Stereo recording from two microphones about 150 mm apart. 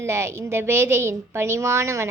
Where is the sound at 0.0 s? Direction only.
15° right (ahead or behind).